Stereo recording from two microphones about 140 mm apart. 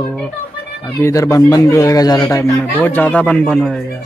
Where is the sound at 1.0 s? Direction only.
20° left (ahead or behind).